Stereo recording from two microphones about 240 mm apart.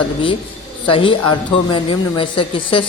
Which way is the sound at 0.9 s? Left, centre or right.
Left.